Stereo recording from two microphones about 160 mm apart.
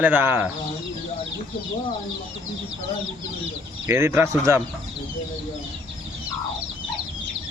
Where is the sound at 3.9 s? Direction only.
15° right (ahead or behind).